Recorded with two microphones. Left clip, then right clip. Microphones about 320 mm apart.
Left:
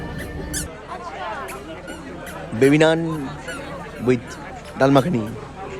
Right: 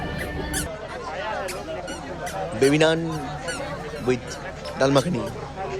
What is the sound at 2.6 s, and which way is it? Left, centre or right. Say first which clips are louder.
Speech: left 4 dB; centre.